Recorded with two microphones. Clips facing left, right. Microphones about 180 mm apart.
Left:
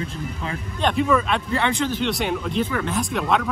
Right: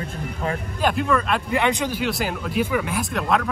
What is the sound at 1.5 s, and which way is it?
Speech, 15° right (ahead or behind).